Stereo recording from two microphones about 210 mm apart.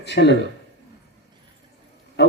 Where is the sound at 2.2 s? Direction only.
55° left (ahead or behind).